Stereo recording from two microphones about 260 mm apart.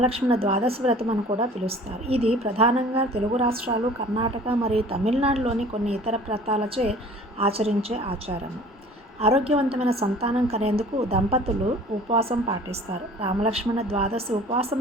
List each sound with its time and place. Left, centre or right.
0.0 s a woman's voice: right